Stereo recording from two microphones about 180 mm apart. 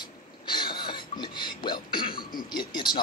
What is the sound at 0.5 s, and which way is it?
Cough, 25° left (ahead or behind).